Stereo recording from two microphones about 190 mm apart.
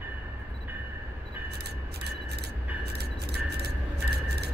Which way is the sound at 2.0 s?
60° right (ahead or behind).